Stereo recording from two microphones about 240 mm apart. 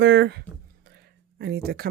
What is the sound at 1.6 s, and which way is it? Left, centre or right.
Speech, right.